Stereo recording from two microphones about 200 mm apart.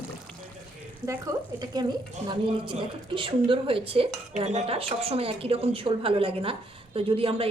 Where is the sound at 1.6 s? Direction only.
20° right (ahead or behind).